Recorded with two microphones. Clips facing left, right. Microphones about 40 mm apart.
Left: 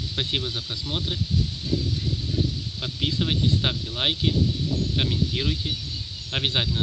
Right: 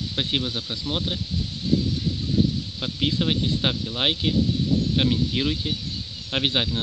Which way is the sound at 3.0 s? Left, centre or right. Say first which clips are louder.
Right 2 dB; centre.